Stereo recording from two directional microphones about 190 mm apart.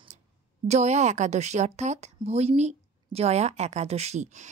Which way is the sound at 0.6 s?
35° right (ahead or behind).